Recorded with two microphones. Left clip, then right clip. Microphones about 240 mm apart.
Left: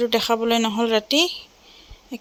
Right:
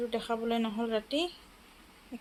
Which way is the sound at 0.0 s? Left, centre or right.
Left.